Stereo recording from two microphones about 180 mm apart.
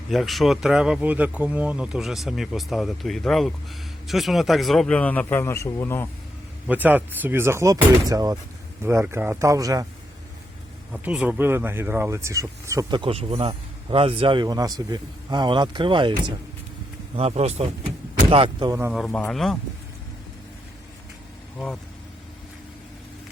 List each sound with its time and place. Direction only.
0.1 s speech: centre (ahead or behind)
6.7 s speech: 10° right (ahead or behind)
10.9 s speech: 5° right (ahead or behind)
18.9 s speech: centre (ahead or behind)